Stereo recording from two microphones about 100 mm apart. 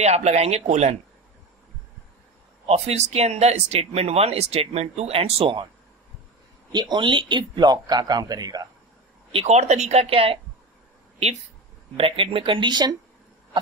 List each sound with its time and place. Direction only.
0.0 s speech: 90° right
2.6 s speech: 90° right; by 5.7 s 65° right (ahead or behind)
6.7 s a man's voice: 50° right (ahead or behind)
9.3 s speech: 90° right; by 10.4 s 70° right (ahead or behind)
12.0 s speech: 65° right (ahead or behind); by 12.9 s 45° right (ahead or behind)